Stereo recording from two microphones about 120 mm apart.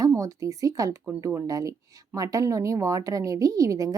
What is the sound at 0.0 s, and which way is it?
Speech, 25° right (ahead or behind).